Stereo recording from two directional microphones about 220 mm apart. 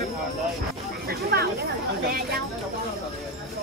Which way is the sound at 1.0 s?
45° right (ahead or behind).